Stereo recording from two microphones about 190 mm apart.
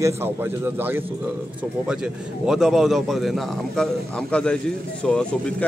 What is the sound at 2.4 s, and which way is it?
A man's voice, centre (ahead or behind).